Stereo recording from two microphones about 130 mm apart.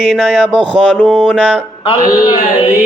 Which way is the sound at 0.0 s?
5° left (ahead or behind).